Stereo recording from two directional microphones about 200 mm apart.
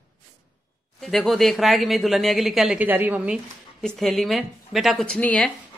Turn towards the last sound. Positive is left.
turn(degrees=5)  # may be behind; listen again after turning